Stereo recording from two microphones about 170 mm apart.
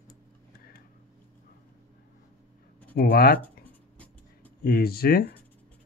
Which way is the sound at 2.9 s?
65° left (ahead or behind).